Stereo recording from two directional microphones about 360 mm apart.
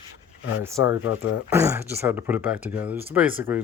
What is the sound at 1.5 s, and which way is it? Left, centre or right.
Speech, centre.